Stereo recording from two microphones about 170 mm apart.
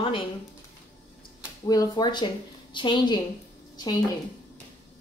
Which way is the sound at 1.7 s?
25° left (ahead or behind).